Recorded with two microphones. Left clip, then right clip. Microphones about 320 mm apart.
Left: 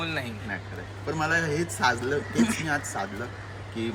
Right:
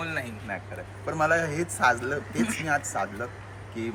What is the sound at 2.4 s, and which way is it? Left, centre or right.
Speech, centre.